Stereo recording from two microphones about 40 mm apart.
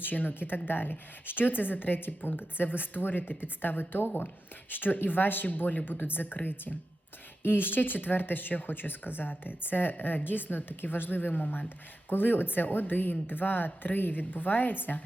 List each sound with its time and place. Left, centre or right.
0.0 s speech: left